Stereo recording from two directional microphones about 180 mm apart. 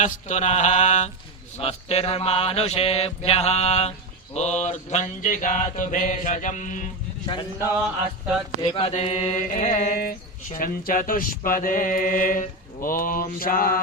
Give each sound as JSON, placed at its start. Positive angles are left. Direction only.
{"t": 0.0, "sound": "mantra", "side_deg": 40}
{"t": 4.4, "sound": "speech", "side_deg": 40}
{"t": 8.7, "sound": "speech", "side_deg": 35}